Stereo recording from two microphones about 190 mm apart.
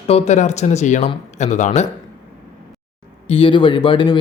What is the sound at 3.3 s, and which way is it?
Speech, 25° left (ahead or behind).